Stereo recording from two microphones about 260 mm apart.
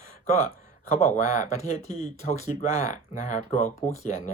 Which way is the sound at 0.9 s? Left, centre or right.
Left.